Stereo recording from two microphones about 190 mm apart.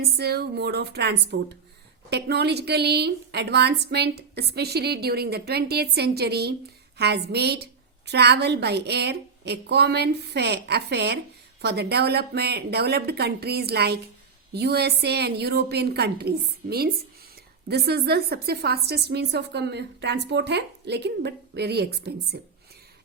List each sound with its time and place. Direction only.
0.0 s a woman's voice: 55° right (ahead or behind)